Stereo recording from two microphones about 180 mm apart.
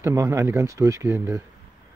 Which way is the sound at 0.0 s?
15° right (ahead or behind).